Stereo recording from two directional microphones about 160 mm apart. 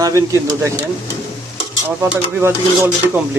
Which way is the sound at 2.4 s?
15° right (ahead or behind).